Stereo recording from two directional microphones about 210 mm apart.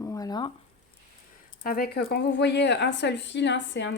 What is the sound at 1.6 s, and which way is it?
A woman's voice, 45° left (ahead or behind).